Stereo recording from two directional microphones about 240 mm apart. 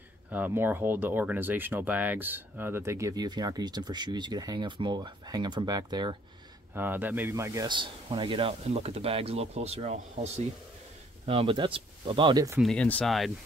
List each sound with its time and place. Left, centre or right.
0.3 s speech: centre
12.5 s speech: centre